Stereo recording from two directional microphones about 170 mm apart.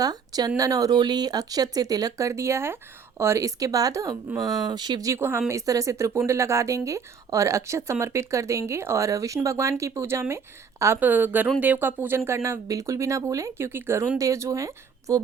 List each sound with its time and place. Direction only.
0.0 s a woman's voice: 20° right (ahead or behind)